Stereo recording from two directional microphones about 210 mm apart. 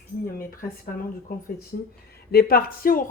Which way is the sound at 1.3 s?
45° left (ahead or behind).